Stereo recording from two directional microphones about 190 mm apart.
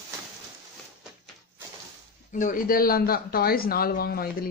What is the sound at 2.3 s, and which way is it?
A man's voice, 40° left (ahead or behind).